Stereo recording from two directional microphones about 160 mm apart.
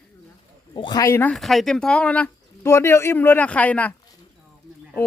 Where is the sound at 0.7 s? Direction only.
25° left (ahead or behind).